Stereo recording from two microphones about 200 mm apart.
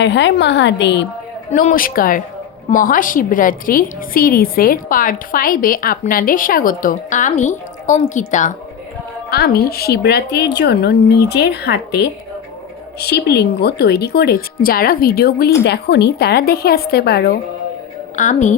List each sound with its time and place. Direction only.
0.0 s a woman's voice: 60° left (ahead or behind)
1.5 s a woman's voice: 40° left (ahead or behind)
9.3 s a woman's voice: 50° left (ahead or behind)
18.2 s a woman's voice: 40° left (ahead or behind)